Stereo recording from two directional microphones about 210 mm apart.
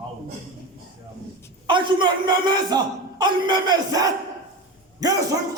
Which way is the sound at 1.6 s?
20° right (ahead or behind).